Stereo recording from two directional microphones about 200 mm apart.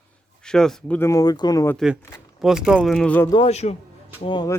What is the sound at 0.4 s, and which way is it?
Speech, 5° left (ahead or behind).